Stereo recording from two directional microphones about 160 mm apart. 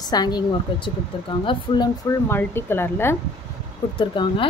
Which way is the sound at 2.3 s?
15° left (ahead or behind).